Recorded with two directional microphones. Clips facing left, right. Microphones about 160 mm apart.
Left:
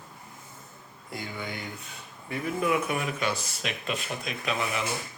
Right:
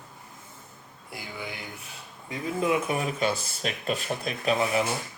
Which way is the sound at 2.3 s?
25° right (ahead or behind).